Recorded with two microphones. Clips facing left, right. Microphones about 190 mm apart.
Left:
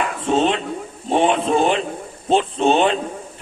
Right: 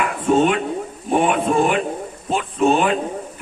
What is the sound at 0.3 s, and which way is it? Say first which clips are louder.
A man's voice: right 2 dB; 30° left (ahead or behind).